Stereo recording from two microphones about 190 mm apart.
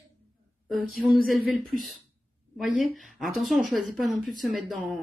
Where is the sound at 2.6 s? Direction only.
Centre (ahead or behind).